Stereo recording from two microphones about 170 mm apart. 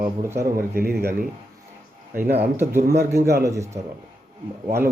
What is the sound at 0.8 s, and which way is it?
Speech, 65° right (ahead or behind).